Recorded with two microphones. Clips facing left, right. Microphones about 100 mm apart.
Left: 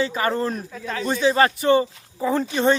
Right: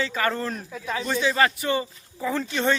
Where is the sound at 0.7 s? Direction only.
10° right (ahead or behind).